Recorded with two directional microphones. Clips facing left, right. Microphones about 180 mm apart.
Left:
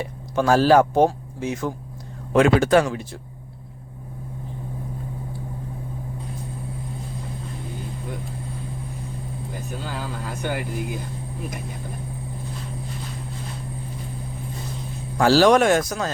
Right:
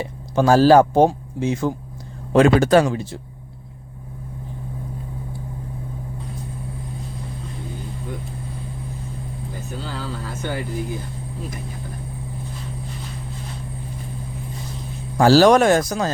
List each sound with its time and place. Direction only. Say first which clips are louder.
0.0 s speech: right 3 dB; 30° right (ahead or behind)
9.9 s speech: right 1 dB; 15° left (ahead or behind)
15.2 s speech: right 3 dB; 40° right (ahead or behind)